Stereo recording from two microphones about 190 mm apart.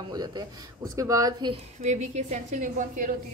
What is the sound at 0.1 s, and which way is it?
A man's voice, 20° right (ahead or behind).